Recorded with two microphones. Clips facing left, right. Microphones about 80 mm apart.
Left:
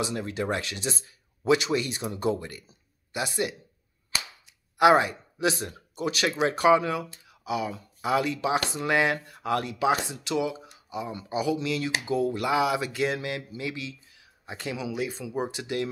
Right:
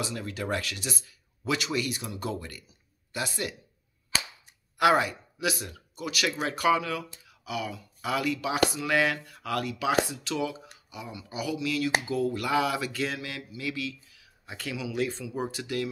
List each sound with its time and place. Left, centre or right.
0.0 s speech: left
4.7 s speech: left
15.0 s speech: centre